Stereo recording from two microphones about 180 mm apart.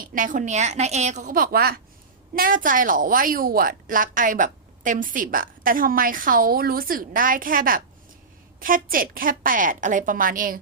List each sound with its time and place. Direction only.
0.0 s a woman's voice: 50° right (ahead or behind)